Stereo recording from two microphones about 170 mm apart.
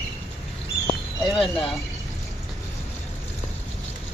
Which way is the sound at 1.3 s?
Centre (ahead or behind).